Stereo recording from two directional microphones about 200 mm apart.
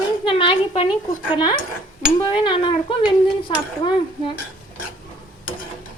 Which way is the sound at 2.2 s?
25° left (ahead or behind).